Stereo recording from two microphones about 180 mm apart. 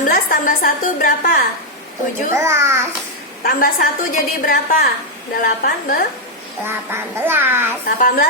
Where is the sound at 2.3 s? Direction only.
15° right (ahead or behind).